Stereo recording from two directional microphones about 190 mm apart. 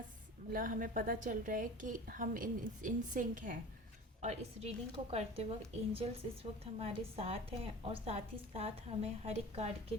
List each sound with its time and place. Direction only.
0.5 s a woman's voice: 45° right (ahead or behind)